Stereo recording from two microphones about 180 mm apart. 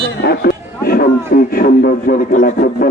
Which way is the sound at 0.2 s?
60° left (ahead or behind).